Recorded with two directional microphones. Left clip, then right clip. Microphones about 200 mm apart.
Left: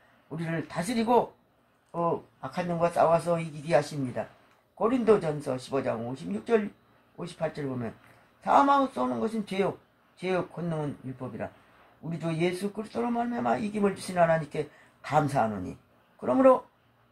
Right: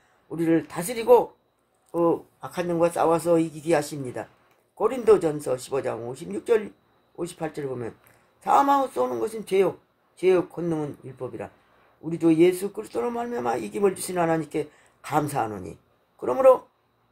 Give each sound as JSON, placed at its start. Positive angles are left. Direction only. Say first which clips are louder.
{"t": 0.4, "sound": "speech", "louder": "right 10 dB", "side_deg": -55}
{"t": 7.2, "sound": "speech", "louder": "right 2 dB", "side_deg": -55}